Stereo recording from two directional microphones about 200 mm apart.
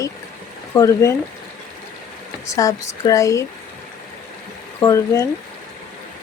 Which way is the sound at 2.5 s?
15° left (ahead or behind).